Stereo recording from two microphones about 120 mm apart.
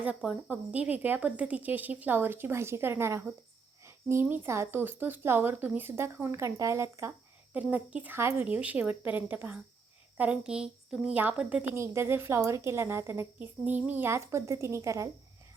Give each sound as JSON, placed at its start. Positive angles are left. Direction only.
{"t": 0.0, "sound": "a woman's voice", "side_deg": -10}
{"t": 7.5, "sound": "a woman's voice", "side_deg": -10}